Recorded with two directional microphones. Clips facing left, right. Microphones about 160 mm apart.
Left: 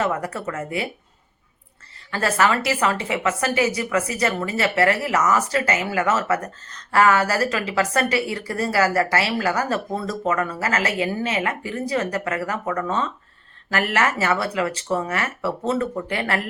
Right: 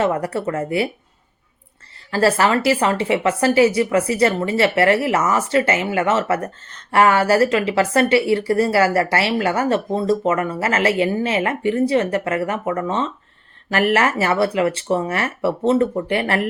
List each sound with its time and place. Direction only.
0.0 s a woman's voice: 30° right (ahead or behind)
2.0 s a woman's voice: 30° right (ahead or behind)